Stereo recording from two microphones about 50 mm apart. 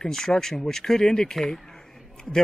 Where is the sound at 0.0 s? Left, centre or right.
Centre.